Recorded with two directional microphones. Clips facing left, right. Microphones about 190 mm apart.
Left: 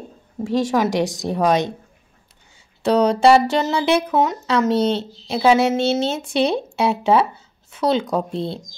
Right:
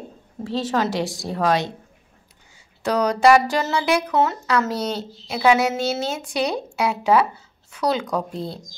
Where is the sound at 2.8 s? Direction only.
25° left (ahead or behind).